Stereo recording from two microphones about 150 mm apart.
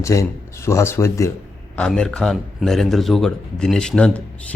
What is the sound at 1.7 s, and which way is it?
A man's voice, 5° left (ahead or behind).